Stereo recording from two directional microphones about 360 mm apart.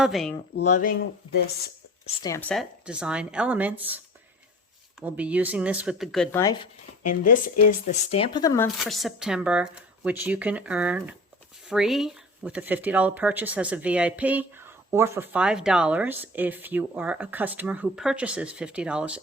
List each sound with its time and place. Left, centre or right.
0.0 s speech: centre
0.5 s speech: left
7.1 s speech: left; by 19.2 s centre